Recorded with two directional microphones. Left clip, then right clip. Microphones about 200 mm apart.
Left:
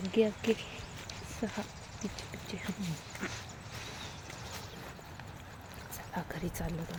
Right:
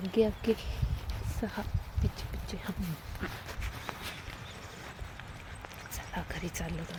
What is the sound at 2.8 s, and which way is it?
Speech, 30° right (ahead or behind).